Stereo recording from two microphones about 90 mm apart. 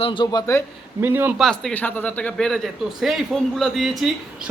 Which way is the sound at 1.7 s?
20° left (ahead or behind).